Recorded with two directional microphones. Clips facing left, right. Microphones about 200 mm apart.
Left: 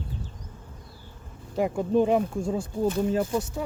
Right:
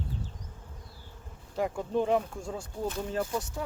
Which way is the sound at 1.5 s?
15° left (ahead or behind).